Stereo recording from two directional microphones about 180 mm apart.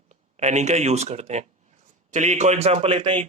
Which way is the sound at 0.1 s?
40° right (ahead or behind).